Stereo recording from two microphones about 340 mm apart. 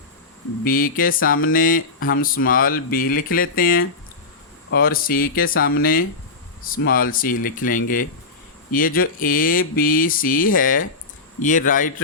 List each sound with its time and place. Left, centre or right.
0.6 s speech: left